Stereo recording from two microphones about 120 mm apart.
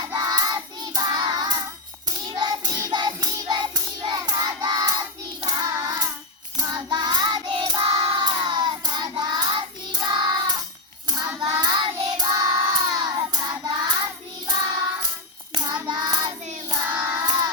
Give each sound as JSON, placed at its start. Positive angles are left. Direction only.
{"t": 0.0, "sound": "child singing", "side_deg": -35}
{"t": 2.0, "sound": "hands", "side_deg": -40}
{"t": 6.6, "sound": "child singing", "side_deg": -35}
{"t": 15.5, "sound": "child singing", "side_deg": -40}
{"t": 17.0, "sound": "child singing", "side_deg": -20}
{"t": 17.2, "sound": "child singing", "side_deg": -35}